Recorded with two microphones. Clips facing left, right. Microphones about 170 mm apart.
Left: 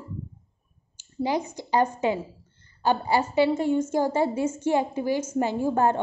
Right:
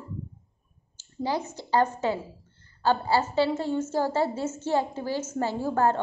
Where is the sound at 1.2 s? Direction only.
15° left (ahead or behind).